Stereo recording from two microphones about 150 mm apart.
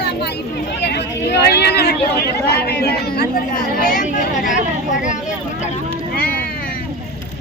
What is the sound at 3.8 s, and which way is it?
Speech, 65° left (ahead or behind).